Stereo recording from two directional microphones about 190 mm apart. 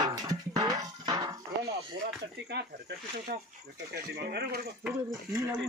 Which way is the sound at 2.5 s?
60° right (ahead or behind).